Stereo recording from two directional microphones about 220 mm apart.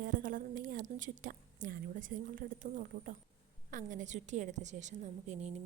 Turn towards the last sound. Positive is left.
turn(degrees=-30)  # may be behind; listen again after turning